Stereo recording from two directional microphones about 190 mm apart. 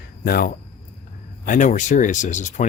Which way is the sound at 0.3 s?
50° left (ahead or behind).